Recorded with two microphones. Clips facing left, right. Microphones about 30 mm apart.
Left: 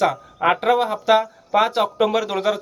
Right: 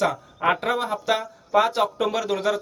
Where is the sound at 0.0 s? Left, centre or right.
Centre.